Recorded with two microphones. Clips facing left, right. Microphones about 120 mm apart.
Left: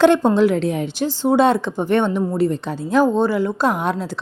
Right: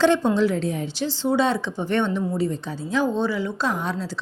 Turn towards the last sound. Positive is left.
turn(degrees=55)  # may be behind; listen again after turning